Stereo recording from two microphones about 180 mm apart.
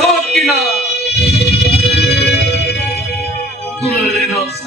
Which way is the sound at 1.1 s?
65° left (ahead or behind).